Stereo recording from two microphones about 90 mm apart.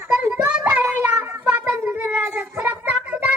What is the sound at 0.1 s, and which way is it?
Child singing, 15° right (ahead or behind).